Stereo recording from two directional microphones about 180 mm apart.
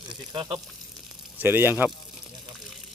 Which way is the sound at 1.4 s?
10° right (ahead or behind).